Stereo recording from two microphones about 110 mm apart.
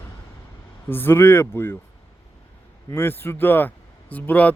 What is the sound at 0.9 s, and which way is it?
Speech, 20° left (ahead or behind).